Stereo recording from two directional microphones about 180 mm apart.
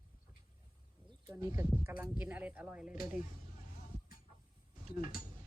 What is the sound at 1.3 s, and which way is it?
Speech, 15° right (ahead or behind).